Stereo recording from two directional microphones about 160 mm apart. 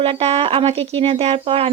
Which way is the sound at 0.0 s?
40° right (ahead or behind).